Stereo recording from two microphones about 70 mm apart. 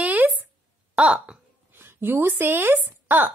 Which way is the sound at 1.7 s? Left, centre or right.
Right.